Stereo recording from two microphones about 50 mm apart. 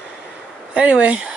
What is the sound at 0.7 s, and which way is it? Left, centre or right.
Speech, right.